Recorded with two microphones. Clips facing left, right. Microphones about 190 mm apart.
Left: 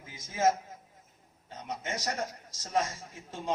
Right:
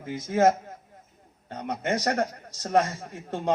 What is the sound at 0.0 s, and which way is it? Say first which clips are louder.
A man's voice: right 7 dB; 60° right (ahead or behind).